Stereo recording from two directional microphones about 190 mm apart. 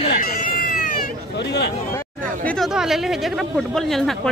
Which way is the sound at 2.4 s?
5° left (ahead or behind).